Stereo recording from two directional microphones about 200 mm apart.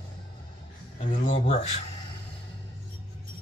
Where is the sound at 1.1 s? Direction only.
35° left (ahead or behind).